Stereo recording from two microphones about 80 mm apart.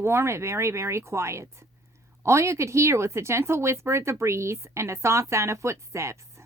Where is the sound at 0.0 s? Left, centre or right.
Right.